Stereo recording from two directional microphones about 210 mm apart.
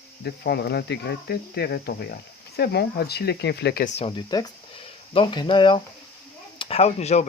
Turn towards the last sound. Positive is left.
turn(degrees=30)  # may be behind; listen again after turning